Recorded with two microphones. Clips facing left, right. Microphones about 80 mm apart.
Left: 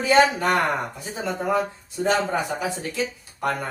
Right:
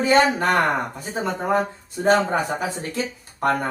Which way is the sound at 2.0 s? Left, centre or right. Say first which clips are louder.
Right 4 dB; right.